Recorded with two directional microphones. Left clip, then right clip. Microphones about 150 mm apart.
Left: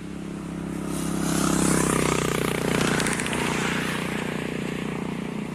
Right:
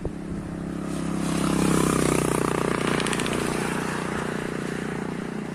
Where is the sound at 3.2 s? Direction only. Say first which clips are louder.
Left 1 dB; 85° right; by 4.3 s 60° right (ahead or behind).